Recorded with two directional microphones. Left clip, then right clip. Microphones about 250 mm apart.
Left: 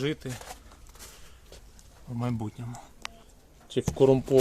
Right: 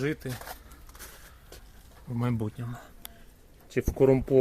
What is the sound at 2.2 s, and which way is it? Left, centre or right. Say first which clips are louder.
Speech: right 1 dB; centre.